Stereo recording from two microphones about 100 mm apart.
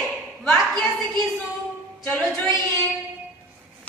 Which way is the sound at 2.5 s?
40° right (ahead or behind).